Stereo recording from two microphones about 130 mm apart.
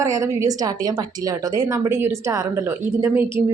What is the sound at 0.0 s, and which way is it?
A woman's voice, 25° right (ahead or behind).